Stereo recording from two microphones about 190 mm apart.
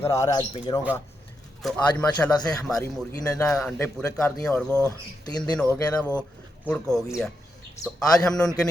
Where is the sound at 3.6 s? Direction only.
10° left (ahead or behind).